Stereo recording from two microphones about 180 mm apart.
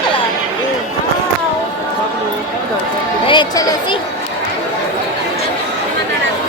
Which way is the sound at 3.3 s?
25° left (ahead or behind).